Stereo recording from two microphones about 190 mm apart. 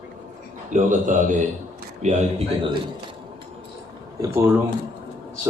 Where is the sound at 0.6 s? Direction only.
40° right (ahead or behind).